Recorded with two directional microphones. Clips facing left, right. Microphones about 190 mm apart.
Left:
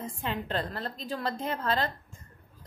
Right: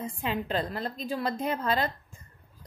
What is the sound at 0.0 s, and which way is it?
A woman's voice, 15° right (ahead or behind).